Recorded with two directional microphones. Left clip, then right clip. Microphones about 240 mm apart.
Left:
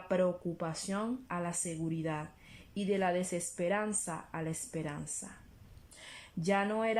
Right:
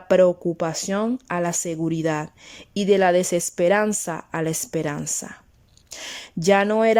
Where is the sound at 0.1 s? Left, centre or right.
Right.